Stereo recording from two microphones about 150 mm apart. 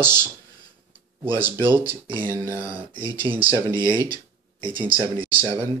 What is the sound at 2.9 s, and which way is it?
Speech, 35° right (ahead or behind).